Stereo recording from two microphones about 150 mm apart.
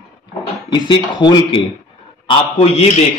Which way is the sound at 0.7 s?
30° left (ahead or behind).